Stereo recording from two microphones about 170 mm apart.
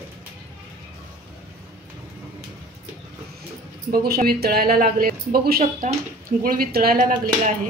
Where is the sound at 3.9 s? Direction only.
65° right (ahead or behind).